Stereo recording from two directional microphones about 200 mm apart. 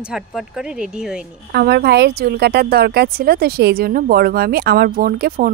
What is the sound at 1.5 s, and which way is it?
Speech, 50° right (ahead or behind).